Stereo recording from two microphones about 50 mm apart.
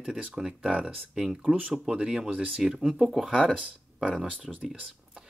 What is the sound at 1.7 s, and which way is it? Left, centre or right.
Speech, right.